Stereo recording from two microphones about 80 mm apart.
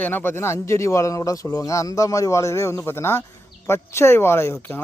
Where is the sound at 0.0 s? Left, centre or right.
Left.